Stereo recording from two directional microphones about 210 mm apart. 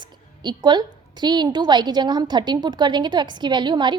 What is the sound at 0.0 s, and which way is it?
A woman's voice, 20° right (ahead or behind).